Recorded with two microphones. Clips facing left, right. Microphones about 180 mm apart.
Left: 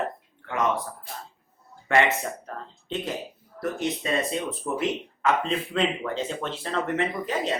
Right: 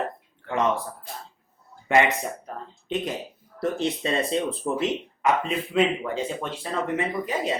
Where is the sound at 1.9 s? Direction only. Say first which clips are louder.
Right 1 dB; 15° right (ahead or behind).